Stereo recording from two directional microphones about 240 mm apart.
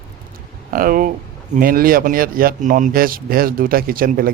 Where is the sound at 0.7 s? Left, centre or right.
Right.